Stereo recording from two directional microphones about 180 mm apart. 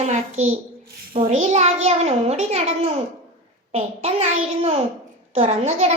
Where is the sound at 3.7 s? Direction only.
35° right (ahead or behind).